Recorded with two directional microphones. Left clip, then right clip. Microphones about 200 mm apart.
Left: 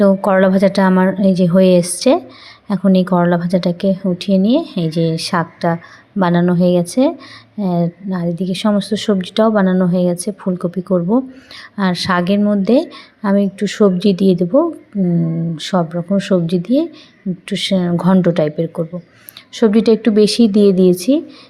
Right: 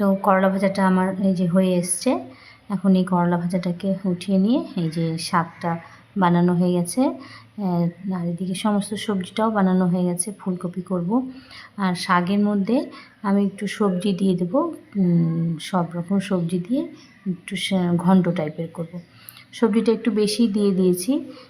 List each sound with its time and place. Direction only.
0.0 s a woman's voice: 25° left (ahead or behind)